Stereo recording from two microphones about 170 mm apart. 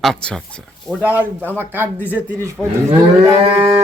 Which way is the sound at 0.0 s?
5° left (ahead or behind).